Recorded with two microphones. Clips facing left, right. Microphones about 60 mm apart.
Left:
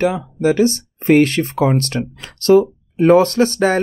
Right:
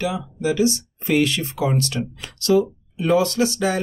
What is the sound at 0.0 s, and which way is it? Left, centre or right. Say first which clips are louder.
Speech: left 7 dB; left.